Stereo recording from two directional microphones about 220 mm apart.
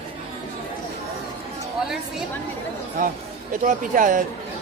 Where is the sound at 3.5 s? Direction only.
35° right (ahead or behind).